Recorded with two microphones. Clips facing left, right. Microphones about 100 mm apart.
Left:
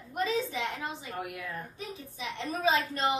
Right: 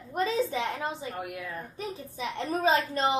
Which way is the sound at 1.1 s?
Centre (ahead or behind).